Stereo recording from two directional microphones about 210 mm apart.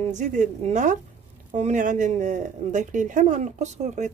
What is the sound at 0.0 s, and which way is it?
Speech, 35° right (ahead or behind).